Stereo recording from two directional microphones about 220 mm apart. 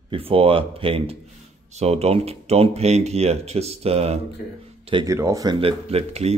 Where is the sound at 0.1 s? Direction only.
25° right (ahead or behind).